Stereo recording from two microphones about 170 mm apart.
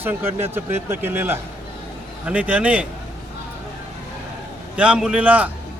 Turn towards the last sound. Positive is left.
turn(degrees=-10)  # may be behind; listen again after turning